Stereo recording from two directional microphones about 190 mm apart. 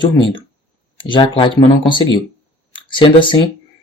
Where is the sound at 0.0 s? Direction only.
25° left (ahead or behind).